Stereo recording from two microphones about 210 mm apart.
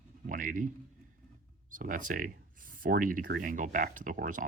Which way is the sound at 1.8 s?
40° right (ahead or behind).